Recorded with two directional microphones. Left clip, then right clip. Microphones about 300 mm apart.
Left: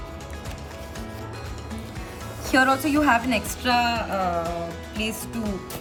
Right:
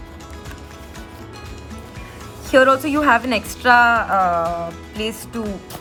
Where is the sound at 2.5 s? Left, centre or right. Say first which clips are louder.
Right 6 dB; centre.